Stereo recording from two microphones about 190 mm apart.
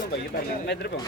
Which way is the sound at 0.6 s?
60° left (ahead or behind).